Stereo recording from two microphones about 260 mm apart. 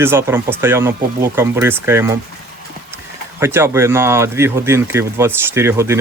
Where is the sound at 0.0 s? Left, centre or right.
Centre.